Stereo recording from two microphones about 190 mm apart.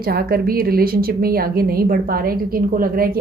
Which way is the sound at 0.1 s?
55° right (ahead or behind).